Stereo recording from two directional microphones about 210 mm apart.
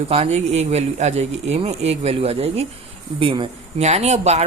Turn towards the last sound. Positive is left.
turn(degrees=-30)  # may be behind; listen again after turning